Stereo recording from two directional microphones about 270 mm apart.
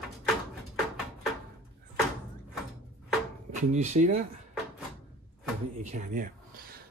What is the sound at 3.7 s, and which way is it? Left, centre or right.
Speech, right.